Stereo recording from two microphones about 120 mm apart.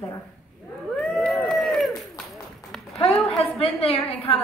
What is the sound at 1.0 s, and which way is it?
Speech, centre (ahead or behind).